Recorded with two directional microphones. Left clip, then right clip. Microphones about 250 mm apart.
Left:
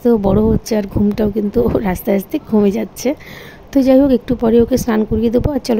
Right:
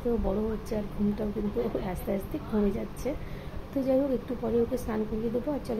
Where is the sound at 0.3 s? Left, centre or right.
Left.